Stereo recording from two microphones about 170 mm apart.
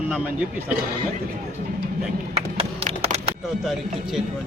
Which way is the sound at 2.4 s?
35° right (ahead or behind).